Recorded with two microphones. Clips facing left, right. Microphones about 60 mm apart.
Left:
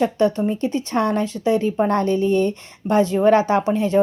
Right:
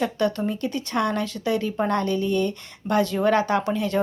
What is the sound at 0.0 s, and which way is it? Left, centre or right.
Speech, left.